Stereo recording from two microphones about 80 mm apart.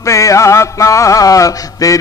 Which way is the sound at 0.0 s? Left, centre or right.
Left.